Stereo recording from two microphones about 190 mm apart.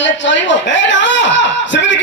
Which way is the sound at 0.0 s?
75° left (ahead or behind).